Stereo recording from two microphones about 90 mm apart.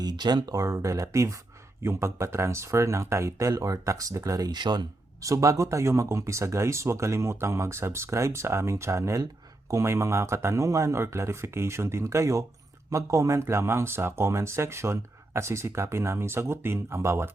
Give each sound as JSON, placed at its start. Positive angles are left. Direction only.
{"t": 0.0, "sound": "speech", "side_deg": -50}
{"t": 5.2, "sound": "speech", "side_deg": -35}